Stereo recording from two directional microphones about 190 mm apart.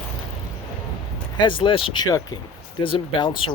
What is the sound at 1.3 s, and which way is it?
Speech, 25° left (ahead or behind).